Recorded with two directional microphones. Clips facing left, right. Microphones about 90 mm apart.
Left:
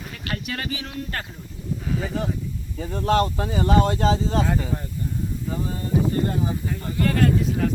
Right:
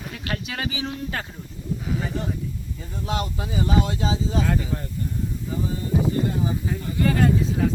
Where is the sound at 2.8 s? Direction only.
65° left (ahead or behind).